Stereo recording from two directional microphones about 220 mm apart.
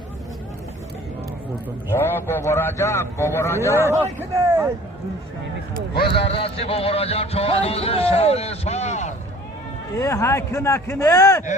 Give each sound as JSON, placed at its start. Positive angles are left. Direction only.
{"t": 2.0, "sound": "a man's voice", "side_deg": 10}
{"t": 4.3, "sound": "speech", "side_deg": -15}
{"t": 5.9, "sound": "speech", "side_deg": 50}
{"t": 6.2, "sound": "speech", "side_deg": 25}
{"t": 9.9, "sound": "a man's voice", "side_deg": 15}